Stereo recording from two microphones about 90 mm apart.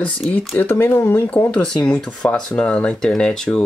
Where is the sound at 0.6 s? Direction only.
25° left (ahead or behind).